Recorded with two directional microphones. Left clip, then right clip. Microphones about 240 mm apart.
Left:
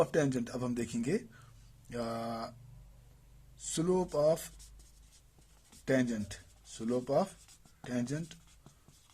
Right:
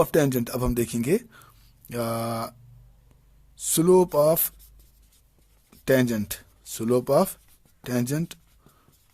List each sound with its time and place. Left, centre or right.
0.0 s speech: right
3.8 s speech: right
5.8 s speech: right